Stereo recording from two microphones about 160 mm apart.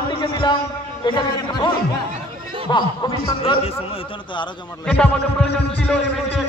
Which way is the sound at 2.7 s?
25° left (ahead or behind).